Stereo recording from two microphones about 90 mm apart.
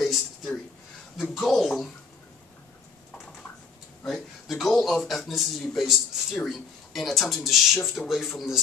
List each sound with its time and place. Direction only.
0.0 s a sound: centre (ahead or behind)
1.3 s speech: 5° left (ahead or behind)
4.0 s speech: centre (ahead or behind)